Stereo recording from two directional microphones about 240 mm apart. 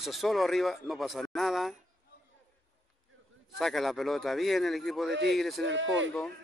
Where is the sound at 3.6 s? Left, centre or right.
Centre.